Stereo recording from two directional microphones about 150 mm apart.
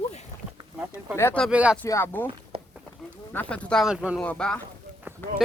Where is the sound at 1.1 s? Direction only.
15° left (ahead or behind).